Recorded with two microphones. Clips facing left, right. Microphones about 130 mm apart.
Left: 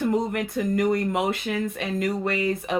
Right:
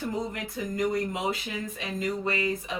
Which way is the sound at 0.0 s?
65° left (ahead or behind).